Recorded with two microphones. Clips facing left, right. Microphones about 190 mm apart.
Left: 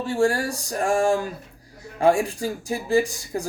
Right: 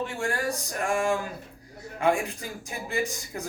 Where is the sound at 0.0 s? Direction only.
35° left (ahead or behind).